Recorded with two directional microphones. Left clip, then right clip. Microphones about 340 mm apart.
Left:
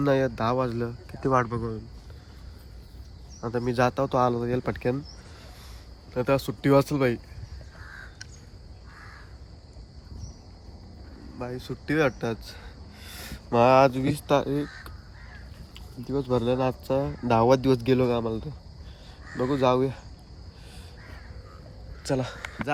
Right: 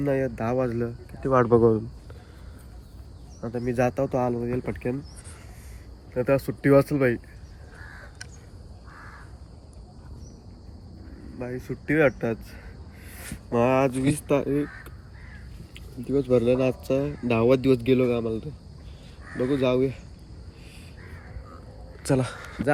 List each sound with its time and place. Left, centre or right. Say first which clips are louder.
0.0 s speech: left 2 dB; centre
1.5 s speech: right 15 dB; centre
3.4 s speech: left 1 dB; centre
6.1 s speech: right 1 dB; centre
11.3 s speech: right 1 dB; centre
15.7 s speech: right 4 dB; centre
19.2 s crow: right 1 dB; centre
19.5 s speech: left 1 dB; centre